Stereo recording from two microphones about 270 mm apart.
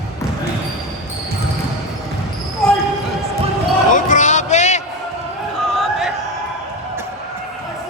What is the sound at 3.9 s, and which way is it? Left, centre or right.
Music, left.